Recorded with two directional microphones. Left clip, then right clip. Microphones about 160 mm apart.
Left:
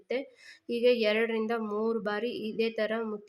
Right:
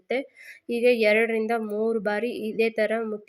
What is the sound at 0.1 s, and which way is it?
Speech, 20° right (ahead or behind).